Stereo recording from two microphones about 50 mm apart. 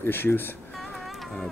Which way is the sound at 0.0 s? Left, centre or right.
Left.